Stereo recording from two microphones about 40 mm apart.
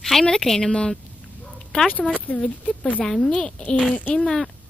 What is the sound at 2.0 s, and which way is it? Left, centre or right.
Speech, left.